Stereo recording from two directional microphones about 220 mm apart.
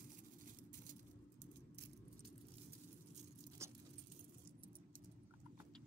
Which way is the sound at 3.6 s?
15° right (ahead or behind).